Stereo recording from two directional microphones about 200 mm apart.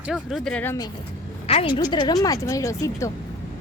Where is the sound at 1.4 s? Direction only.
30° left (ahead or behind).